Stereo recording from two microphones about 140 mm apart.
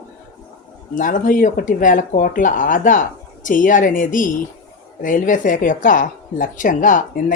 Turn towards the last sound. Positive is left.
turn(degrees=70)  # may be behind; listen again after turning